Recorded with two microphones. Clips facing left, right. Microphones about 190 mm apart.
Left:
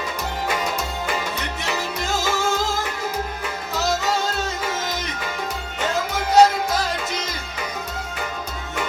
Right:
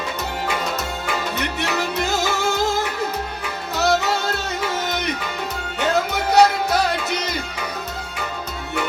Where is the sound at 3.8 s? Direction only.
65° right (ahead or behind).